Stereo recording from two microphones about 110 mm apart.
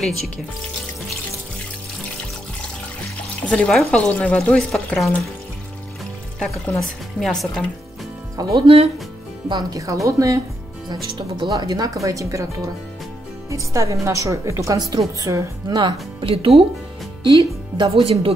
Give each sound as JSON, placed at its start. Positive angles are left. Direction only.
{"t": 3.4, "sound": "speech", "side_deg": 5}
{"t": 6.4, "sound": "speech", "side_deg": 5}
{"t": 8.4, "sound": "speech", "side_deg": -35}
{"t": 8.6, "sound": "speech", "side_deg": -70}
{"t": 9.5, "sound": "speech", "side_deg": -35}
{"t": 10.9, "sound": "a woman's voice", "side_deg": -40}
{"t": 15.8, "sound": "speech", "side_deg": -55}
{"t": 17.2, "sound": "speech", "side_deg": -45}
{"t": 17.8, "sound": "speech", "side_deg": -60}